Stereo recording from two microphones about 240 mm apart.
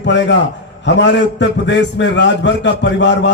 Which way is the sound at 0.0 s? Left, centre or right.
Left.